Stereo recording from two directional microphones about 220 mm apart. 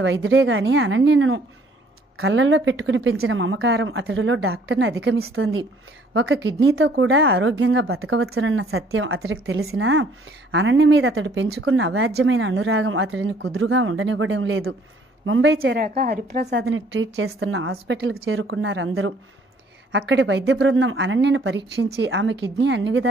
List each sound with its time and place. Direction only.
0.0 s a woman's voice: 60° right (ahead or behind)
5.0 s a woman's voice: 70° right (ahead or behind)
15.7 s a woman's voice: 45° right (ahead or behind)
16.6 s a woman's voice: 65° right (ahead or behind)
18.5 s a woman's voice: 55° right (ahead or behind)